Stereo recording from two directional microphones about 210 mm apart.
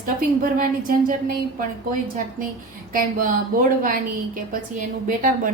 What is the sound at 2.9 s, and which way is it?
A woman's voice, 40° right (ahead or behind).